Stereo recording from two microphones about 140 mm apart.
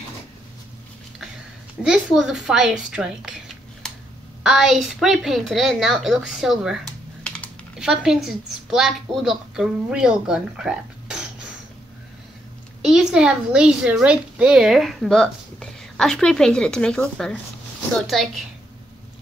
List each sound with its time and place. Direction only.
1.8 s a woman's voice: 5° right (ahead or behind)
7.2 s typing: 10° left (ahead or behind)
7.8 s a woman's voice: 5° right (ahead or behind)
12.8 s a woman's voice: 5° right (ahead or behind)